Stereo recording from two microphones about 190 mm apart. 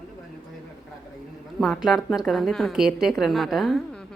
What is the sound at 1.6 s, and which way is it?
A woman's voice, centre (ahead or behind).